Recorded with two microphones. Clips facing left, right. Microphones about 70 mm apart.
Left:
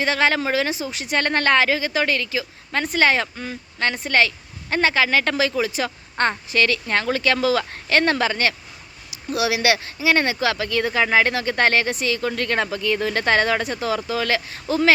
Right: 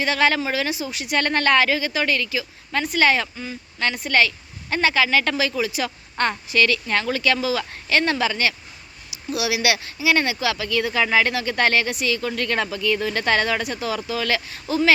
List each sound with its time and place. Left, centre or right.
0.0 s speech: left
3.3 s speech: left
3.8 s speech: left
7.3 s speech: left